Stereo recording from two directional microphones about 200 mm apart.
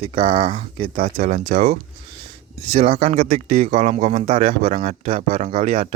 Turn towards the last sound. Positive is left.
turn(degrees=-30)  # may be behind; listen again after turning